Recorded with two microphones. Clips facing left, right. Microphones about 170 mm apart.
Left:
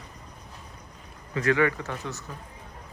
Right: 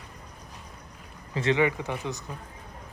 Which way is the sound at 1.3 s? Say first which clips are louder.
Left 1 dB; 25° right (ahead or behind).